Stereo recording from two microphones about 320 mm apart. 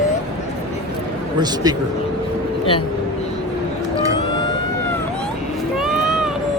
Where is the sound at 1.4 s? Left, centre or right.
Centre.